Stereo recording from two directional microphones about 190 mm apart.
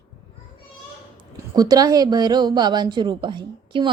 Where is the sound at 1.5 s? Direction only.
20° right (ahead or behind).